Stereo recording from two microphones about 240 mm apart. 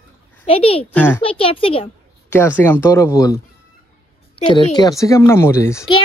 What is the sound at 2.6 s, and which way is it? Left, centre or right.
A child's voice, centre.